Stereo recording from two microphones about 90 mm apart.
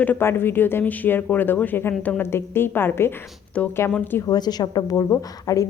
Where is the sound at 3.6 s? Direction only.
15° left (ahead or behind).